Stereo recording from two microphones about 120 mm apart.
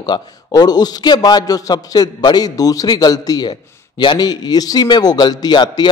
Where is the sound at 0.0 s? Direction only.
35° left (ahead or behind).